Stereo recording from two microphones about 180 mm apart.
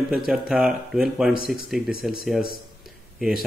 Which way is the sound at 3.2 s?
5° right (ahead or behind).